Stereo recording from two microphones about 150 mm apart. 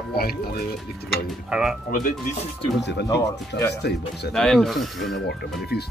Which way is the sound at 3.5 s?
90° left.